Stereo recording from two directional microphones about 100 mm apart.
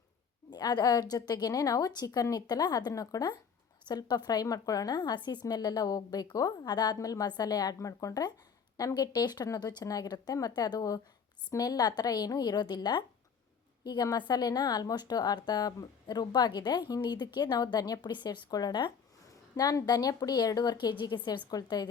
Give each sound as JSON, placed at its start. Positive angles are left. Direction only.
{"t": 0.5, "sound": "a woman's voice", "side_deg": 40}